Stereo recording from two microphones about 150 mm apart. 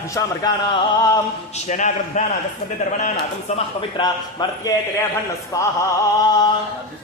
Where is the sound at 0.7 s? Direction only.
35° left (ahead or behind).